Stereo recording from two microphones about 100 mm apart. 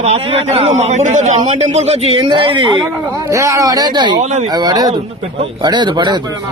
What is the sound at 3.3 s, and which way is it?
Speech, 30° right (ahead or behind).